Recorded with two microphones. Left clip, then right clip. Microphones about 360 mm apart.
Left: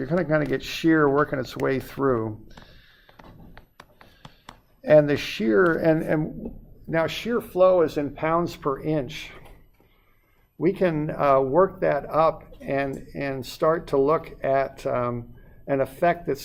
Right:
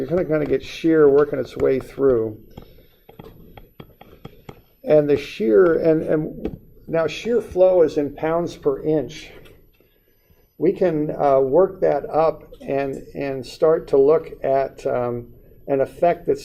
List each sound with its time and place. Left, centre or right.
0.1 s speech: left
4.9 s speech: left
7.5 s speech: left
10.6 s speech: left
12.0 s speech: left